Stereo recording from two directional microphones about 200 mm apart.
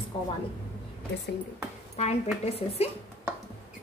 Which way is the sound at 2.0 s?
30° left (ahead or behind).